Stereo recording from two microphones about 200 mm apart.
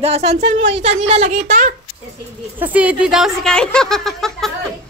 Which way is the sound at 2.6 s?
5° right (ahead or behind).